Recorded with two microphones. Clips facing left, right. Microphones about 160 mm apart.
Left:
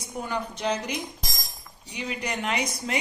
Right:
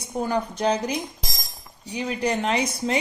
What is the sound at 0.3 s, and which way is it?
Speech, 40° right (ahead or behind).